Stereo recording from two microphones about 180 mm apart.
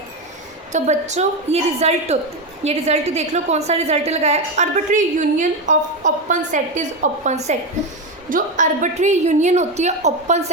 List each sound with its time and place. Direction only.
0.7 s a woman's voice: 40° right (ahead or behind)